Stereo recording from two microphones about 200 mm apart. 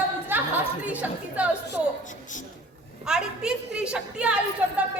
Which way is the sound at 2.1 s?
40° left (ahead or behind).